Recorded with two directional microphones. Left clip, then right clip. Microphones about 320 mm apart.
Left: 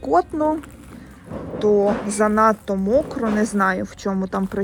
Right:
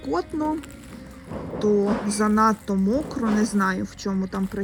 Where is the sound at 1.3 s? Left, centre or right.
Right.